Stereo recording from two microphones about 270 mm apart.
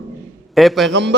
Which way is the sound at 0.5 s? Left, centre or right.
Centre.